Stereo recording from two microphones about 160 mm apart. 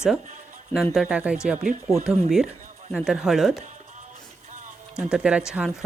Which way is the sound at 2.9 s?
5° right (ahead or behind).